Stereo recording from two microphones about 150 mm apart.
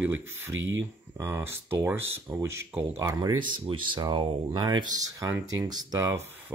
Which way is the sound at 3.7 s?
30° right (ahead or behind).